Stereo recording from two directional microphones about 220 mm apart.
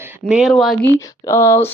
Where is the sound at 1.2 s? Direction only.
10° left (ahead or behind).